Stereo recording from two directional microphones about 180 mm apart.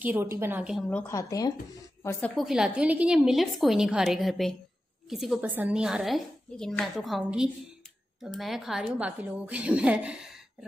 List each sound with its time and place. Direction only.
0.0 s a woman's voice: 10° right (ahead or behind)
0.8 s a woman's voice: 10° left (ahead or behind)
2.3 s a woman's voice: centre (ahead or behind)